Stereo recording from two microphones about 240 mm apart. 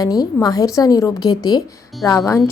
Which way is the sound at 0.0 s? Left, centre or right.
Centre.